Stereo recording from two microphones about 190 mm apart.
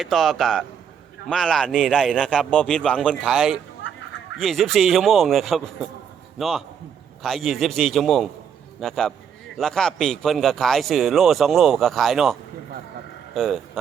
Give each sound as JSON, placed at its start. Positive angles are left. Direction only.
{"t": 0.0, "sound": "a man's voice", "side_deg": 0}
{"t": 7.2, "sound": "a man's voice", "side_deg": 0}